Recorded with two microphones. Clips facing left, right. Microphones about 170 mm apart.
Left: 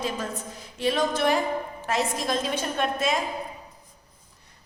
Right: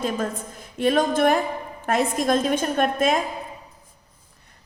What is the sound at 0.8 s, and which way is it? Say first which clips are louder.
A woman's voice: right 5 dB; 50° right (ahead or behind).